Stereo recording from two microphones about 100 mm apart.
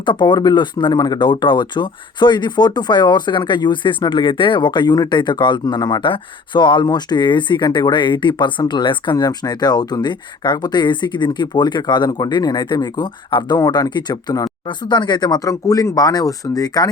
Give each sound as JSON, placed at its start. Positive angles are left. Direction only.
{"t": 0.0, "sound": "speech", "side_deg": 50}